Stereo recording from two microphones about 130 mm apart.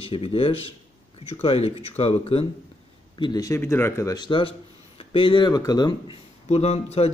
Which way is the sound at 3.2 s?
30° left (ahead or behind).